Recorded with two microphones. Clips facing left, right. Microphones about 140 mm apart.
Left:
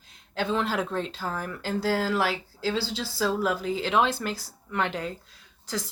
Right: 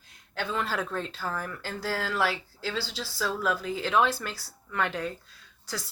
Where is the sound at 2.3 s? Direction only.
25° left (ahead or behind).